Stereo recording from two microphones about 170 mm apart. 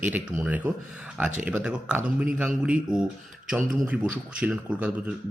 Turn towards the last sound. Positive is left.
turn(degrees=-5)  # may be behind; listen again after turning